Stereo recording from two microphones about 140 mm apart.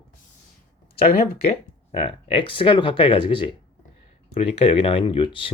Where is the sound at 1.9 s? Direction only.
40° left (ahead or behind).